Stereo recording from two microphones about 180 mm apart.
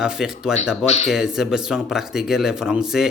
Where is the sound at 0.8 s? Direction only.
35° left (ahead or behind).